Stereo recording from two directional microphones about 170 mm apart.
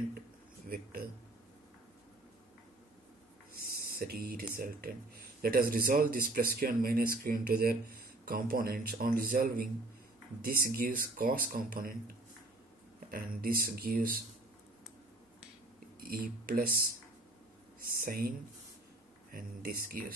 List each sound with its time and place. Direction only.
3.6 s speech: 65° right (ahead or behind)
13.1 s speech: 60° right (ahead or behind)
16.0 s speech: 55° right (ahead or behind)
17.7 s speech: 55° right (ahead or behind)
19.3 s speech: 55° right (ahead or behind)